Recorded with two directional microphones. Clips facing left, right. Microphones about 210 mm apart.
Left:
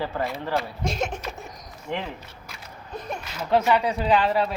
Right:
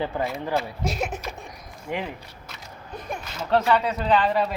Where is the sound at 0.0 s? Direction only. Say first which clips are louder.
Right 1 dB; 15° right (ahead or behind).